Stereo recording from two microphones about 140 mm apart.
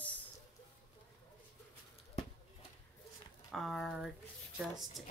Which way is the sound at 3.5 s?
Centre (ahead or behind).